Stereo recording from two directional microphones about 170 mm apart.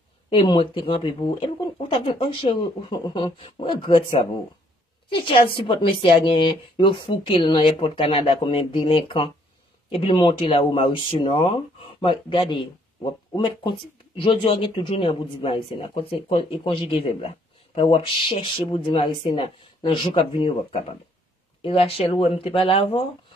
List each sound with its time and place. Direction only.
0.3 s speech: 30° left (ahead or behind)